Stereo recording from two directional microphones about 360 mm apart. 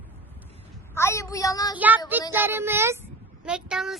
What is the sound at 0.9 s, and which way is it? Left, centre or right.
Speech, centre.